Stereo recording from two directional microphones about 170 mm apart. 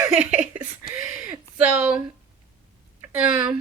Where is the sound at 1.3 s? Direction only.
10° right (ahead or behind).